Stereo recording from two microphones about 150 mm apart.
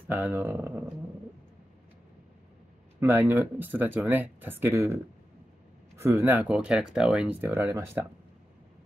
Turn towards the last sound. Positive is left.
turn(degrees=-15)  # may be behind; listen again after turning